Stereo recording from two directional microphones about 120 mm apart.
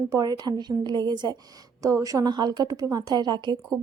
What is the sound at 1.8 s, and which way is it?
Speech, 25° right (ahead or behind).